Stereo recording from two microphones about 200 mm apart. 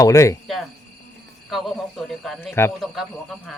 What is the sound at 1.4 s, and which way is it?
Speech, centre (ahead or behind).